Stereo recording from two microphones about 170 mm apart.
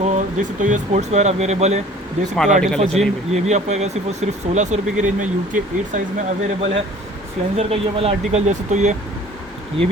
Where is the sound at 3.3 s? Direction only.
40° right (ahead or behind).